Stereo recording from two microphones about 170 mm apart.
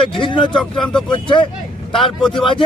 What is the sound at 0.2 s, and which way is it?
Speech, 30° left (ahead or behind).